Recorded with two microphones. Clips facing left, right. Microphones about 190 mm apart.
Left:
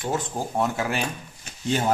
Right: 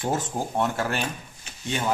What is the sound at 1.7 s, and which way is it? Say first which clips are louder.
Speech: left 3 dB; 35° left (ahead or behind).